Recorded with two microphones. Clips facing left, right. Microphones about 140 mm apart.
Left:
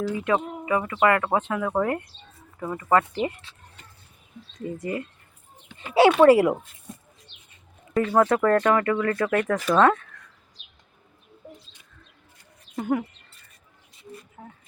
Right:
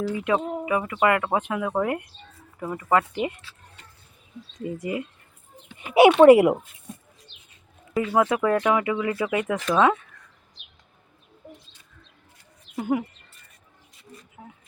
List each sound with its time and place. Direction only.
0.3 s speech: 15° right (ahead or behind)
4.6 s speech: 15° right (ahead or behind)
8.1 s speech: 10° right (ahead or behind)
12.7 s speech: 10° right (ahead or behind)